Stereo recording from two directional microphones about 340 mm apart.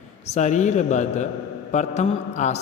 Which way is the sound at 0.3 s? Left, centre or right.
Left.